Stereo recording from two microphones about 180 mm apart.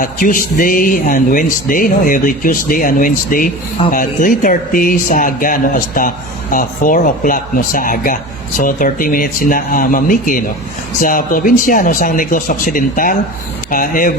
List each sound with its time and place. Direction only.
0.0 s speech: 50° left (ahead or behind)